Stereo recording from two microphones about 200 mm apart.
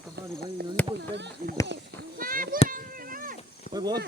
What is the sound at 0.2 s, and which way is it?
Insect, 55° right (ahead or behind).